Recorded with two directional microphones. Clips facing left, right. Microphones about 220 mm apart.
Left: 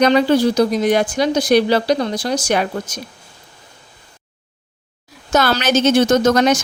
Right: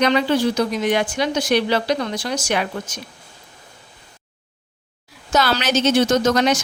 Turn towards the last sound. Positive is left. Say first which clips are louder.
# left 3 dB
turn(degrees=45)  # may be behind; listen again after turning